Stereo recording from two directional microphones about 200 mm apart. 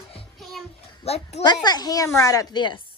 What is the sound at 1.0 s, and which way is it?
A child's voice, 30° left (ahead or behind).